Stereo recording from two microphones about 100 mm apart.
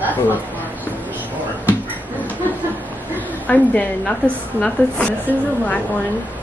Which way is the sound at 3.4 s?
15° left (ahead or behind).